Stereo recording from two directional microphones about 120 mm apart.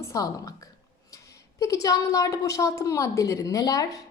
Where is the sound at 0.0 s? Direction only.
30° left (ahead or behind).